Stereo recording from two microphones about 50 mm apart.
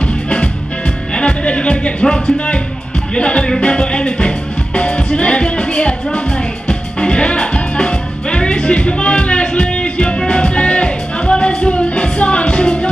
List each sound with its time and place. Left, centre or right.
1.1 s music: left